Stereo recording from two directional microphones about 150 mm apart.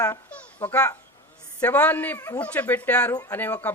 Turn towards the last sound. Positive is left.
turn(degrees=10)  # may be behind; listen again after turning